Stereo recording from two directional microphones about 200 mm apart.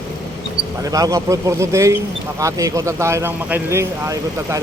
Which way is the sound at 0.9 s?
15° right (ahead or behind).